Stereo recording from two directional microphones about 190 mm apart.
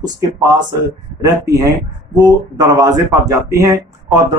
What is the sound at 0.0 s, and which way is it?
Speech, 20° right (ahead or behind).